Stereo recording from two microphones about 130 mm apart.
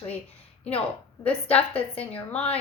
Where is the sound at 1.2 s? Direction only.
50° left (ahead or behind).